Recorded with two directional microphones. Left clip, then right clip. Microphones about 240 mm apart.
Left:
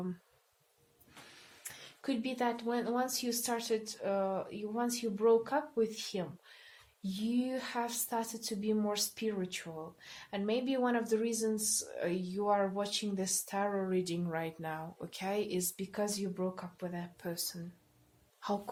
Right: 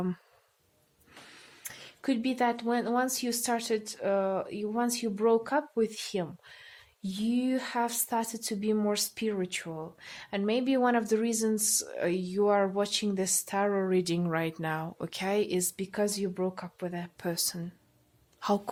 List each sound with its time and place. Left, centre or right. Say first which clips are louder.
1.6 s speech: right 6 dB; right